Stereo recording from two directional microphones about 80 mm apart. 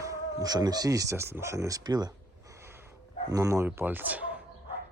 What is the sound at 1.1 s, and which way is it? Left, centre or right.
Speech, right.